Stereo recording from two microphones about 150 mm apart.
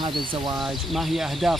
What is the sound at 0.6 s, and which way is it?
Speech, centre (ahead or behind).